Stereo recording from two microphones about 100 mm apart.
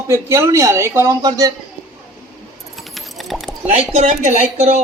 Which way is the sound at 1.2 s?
35° right (ahead or behind).